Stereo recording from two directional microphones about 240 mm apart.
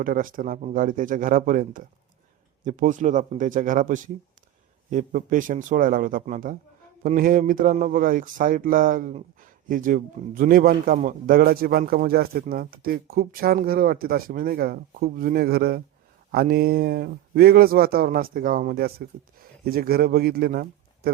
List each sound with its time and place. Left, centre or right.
0.0 s speech: right